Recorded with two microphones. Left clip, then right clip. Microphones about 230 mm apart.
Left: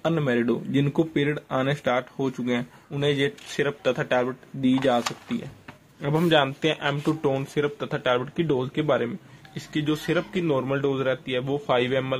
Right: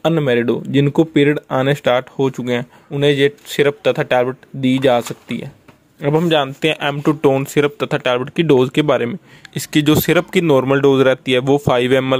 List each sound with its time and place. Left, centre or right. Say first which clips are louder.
0.0 s speech: right 9 dB; right
5.9 s speech: right 6 dB; right